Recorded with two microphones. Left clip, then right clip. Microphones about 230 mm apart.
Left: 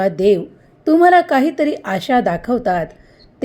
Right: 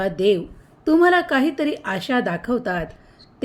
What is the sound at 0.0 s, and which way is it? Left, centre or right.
A woman's voice, centre.